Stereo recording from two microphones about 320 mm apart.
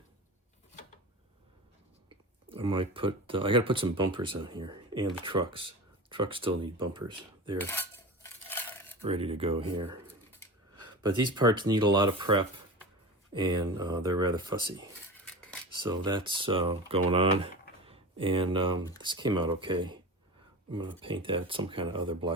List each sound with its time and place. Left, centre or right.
2.0 s speech: centre
7.6 s cutlery: centre
9.0 s speech: centre
15.2 s cutlery: centre
15.8 s speech: centre